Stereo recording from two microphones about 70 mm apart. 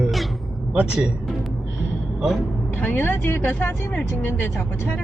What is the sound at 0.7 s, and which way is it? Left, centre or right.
Speech, centre.